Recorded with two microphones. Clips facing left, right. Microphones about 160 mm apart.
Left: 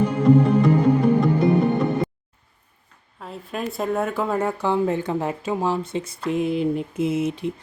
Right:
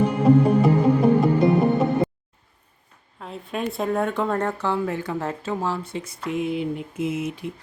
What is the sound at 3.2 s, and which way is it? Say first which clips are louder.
Speech: right 1 dB; centre (ahead or behind).